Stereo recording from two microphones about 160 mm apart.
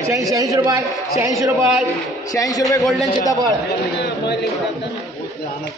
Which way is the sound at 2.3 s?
20° left (ahead or behind).